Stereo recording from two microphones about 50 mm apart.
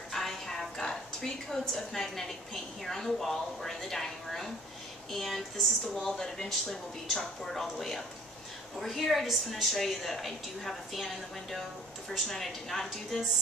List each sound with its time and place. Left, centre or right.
0.1 s a woman's voice: centre
12.1 s a woman's voice: centre